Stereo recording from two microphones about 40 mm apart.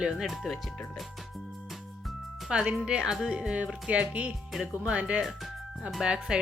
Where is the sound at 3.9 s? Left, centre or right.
Right.